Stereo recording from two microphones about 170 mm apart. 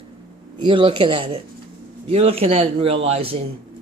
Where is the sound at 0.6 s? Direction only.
30° right (ahead or behind).